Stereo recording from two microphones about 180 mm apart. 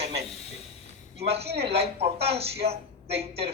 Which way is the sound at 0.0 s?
35° right (ahead or behind).